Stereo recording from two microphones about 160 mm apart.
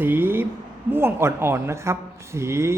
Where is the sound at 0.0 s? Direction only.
10° right (ahead or behind).